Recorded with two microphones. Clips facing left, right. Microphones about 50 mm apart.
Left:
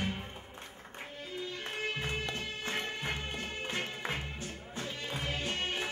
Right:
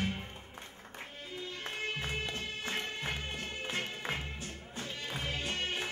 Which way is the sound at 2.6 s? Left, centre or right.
Centre.